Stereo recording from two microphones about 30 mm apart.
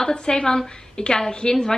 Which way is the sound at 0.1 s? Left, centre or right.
Left.